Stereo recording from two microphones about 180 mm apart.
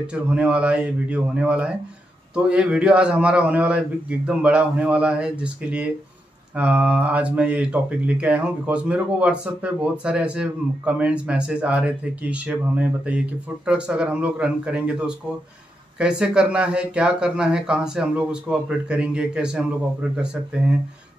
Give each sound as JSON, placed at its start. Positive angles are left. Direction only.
{"t": 0.0, "sound": "speech", "side_deg": -5}